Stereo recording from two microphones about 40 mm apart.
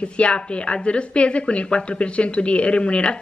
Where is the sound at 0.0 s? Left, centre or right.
Left.